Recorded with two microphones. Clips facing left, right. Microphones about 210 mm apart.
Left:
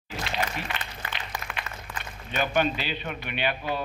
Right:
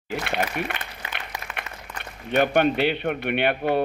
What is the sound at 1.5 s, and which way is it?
A man's voice, 60° right (ahead or behind).